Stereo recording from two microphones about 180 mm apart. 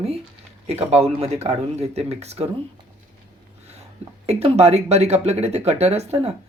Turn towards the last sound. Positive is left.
turn(degrees=-35)  # may be behind; listen again after turning